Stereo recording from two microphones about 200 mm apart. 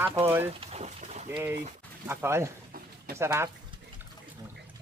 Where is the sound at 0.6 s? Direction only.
35° right (ahead or behind).